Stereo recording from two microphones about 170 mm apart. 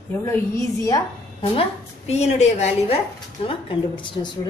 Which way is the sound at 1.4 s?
35° left (ahead or behind).